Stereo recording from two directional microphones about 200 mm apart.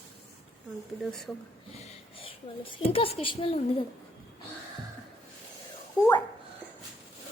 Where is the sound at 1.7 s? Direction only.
25° left (ahead or behind).